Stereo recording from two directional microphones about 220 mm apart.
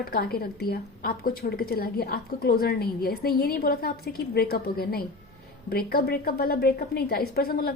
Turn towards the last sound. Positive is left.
turn(degrees=40)  # may be behind; listen again after turning